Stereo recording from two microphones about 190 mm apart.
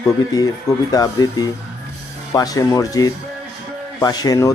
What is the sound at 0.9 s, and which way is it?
Speech, 20° left (ahead or behind).